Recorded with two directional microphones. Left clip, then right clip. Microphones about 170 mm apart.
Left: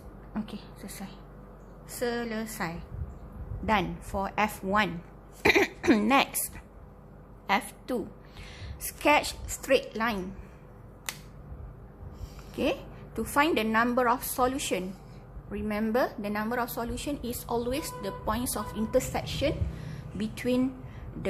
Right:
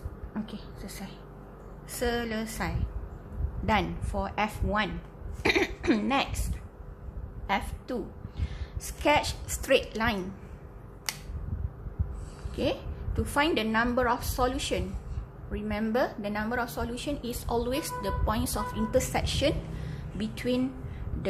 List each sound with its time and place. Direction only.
0.3 s a woman's voice: 20° left (ahead or behind)
4.1 s a woman's voice: 25° left (ahead or behind)
7.4 s a woman's voice: 30° left (ahead or behind); by 10.2 s 15° left (ahead or behind)
12.6 s a woman's voice: 25° left (ahead or behind); by 19.5 s 5° left (ahead or behind)
19.9 s a sound: 20° left (ahead or behind)